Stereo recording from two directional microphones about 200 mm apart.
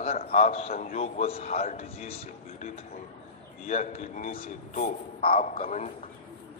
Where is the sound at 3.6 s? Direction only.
40° left (ahead or behind).